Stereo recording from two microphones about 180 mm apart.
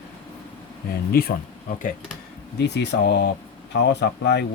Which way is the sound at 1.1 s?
55° left (ahead or behind).